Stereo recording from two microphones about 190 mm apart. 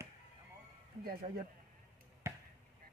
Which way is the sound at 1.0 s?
50° right (ahead or behind).